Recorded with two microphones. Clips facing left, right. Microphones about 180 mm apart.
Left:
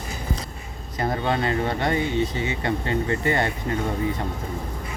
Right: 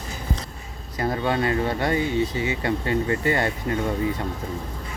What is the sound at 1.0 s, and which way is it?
Speech, 25° left (ahead or behind).